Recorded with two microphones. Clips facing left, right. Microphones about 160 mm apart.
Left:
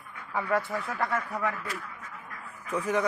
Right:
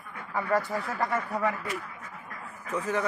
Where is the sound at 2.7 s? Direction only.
15° left (ahead or behind).